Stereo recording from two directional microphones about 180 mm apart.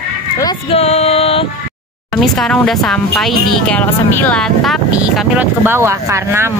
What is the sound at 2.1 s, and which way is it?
Speech, 5° left (ahead or behind).